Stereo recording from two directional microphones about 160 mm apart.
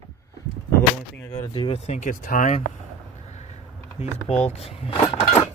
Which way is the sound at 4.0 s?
40° left (ahead or behind).